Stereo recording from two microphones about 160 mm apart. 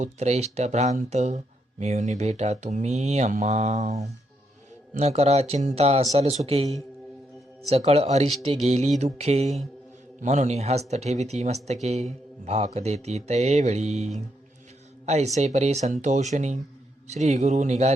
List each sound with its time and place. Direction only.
0.0 s speech: 45° right (ahead or behind)